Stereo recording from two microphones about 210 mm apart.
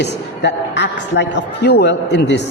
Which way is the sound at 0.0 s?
55° left (ahead or behind).